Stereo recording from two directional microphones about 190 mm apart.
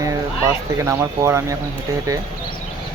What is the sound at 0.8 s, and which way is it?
Speech, 15° right (ahead or behind).